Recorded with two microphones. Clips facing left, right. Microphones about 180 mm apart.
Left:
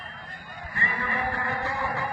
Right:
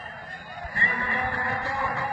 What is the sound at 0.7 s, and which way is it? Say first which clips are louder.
Music: even; 35° right (ahead or behind).